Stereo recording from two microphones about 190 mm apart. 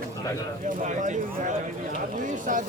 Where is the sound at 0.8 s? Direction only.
40° right (ahead or behind).